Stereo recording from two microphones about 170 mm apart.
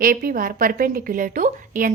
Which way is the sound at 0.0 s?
60° right (ahead or behind).